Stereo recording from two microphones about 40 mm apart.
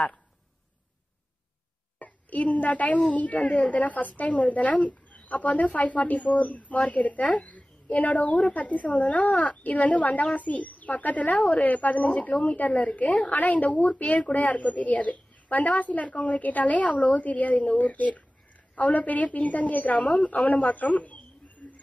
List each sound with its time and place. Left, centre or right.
2.0 s a woman's voice: left
9.3 s speech: left
9.6 s speech: left